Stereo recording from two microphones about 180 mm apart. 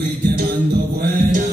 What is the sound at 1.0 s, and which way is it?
Music, 45° right (ahead or behind).